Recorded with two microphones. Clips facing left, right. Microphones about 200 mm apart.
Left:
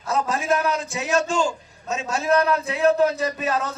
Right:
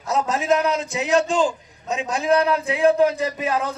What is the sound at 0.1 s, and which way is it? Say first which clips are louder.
A man's voice: right 2 dB; 20° right (ahead or behind).